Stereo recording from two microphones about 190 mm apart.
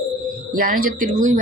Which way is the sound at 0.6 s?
45° right (ahead or behind).